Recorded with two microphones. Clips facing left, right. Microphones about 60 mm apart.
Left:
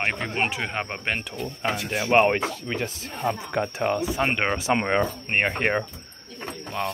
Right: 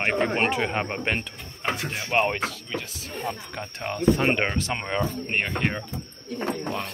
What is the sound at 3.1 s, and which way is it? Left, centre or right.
Speech, left.